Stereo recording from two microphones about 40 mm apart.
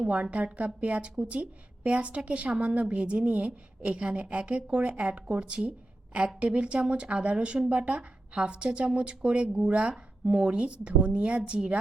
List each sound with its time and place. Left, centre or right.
0.0 s a woman's voice: right